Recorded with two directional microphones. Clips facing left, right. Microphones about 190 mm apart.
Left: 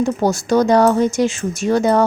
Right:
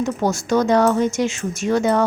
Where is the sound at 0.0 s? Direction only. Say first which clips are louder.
Left 3 dB; 35° left (ahead or behind).